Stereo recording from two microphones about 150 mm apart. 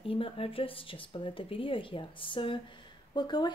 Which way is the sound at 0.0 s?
40° left (ahead or behind).